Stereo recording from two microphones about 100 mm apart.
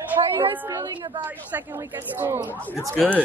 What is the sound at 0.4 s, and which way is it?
Speech, 30° right (ahead or behind).